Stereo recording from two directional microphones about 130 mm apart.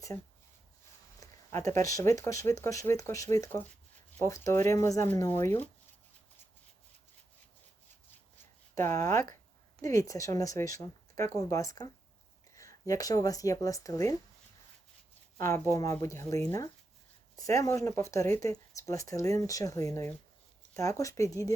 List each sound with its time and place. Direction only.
1.2 s speech: 25° left (ahead or behind)
8.8 s speech: 20° left (ahead or behind)
15.4 s speech: 20° left (ahead or behind)